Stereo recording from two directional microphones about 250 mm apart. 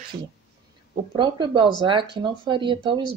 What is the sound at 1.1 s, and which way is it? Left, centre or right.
Speech, centre.